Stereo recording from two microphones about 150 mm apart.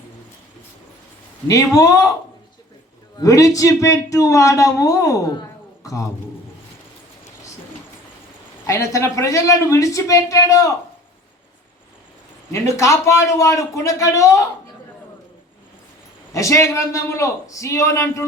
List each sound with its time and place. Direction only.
1.5 s speech: 20° left (ahead or behind)
3.2 s speech: 20° left (ahead or behind)
8.6 s speech: 20° left (ahead or behind)
12.5 s speech: 20° left (ahead or behind)
16.3 s speech: 20° left (ahead or behind)